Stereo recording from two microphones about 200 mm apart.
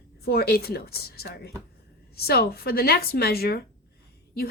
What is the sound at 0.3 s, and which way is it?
A woman's voice, 50° left (ahead or behind).